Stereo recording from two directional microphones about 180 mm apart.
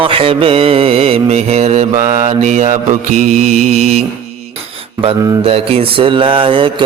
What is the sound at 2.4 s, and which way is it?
Mantra, 45° right (ahead or behind).